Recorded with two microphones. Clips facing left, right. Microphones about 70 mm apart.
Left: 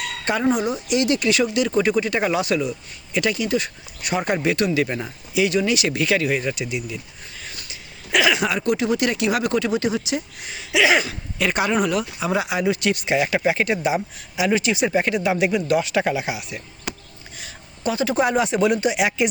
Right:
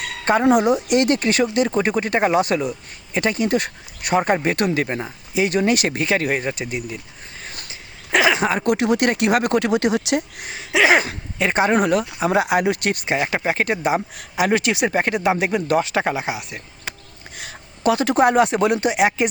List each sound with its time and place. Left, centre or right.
0.0 s a sound: right
0.4 s speech: right
4.9 s speech: right
5.3 s speech: right
7.7 s a sound: right
8.6 s speech: right
11.3 s speech: right
11.8 s speech: right
17.3 s speech: right